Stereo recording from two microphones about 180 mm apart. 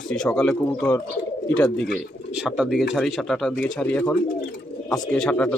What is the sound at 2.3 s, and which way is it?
Speech, 5° right (ahead or behind).